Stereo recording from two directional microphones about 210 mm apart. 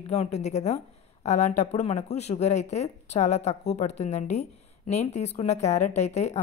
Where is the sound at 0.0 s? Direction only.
30° left (ahead or behind).